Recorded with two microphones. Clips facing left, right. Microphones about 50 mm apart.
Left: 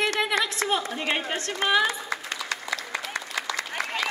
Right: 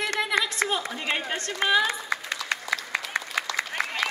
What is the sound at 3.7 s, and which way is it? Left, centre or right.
Applause, centre.